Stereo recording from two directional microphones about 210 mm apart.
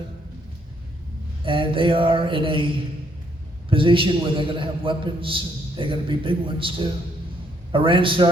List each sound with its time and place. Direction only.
1.5 s a man's voice: 25° right (ahead or behind)
3.7 s a man's voice: 25° right (ahead or behind)